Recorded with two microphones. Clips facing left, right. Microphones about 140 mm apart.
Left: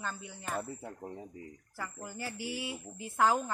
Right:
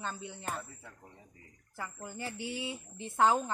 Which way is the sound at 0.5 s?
50° left (ahead or behind).